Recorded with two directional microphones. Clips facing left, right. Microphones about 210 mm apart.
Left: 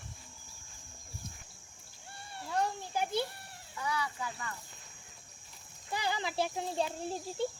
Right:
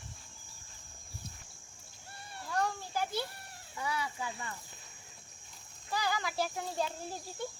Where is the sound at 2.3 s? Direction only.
25° left (ahead or behind).